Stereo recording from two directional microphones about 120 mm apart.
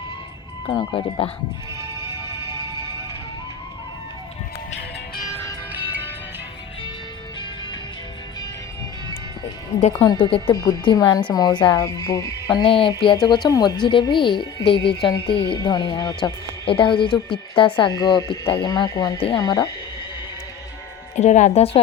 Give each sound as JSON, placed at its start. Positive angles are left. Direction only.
{"t": 0.7, "sound": "speech", "side_deg": 40}
{"t": 10.1, "sound": "speech", "side_deg": 45}
{"t": 10.5, "sound": "speech", "side_deg": 35}
{"t": 13.1, "sound": "speech", "side_deg": 35}
{"t": 21.2, "sound": "a woman's voice", "side_deg": 80}